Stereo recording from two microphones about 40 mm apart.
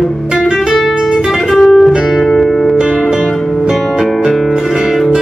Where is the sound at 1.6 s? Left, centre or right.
Centre.